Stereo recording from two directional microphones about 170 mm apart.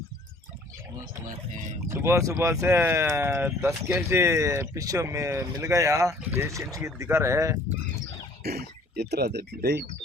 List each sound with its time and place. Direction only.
1.9 s speech: 15° right (ahead or behind)
8.4 s speech: 70° right (ahead or behind)